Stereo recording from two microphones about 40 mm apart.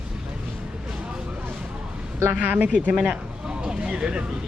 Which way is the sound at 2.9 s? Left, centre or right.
Right.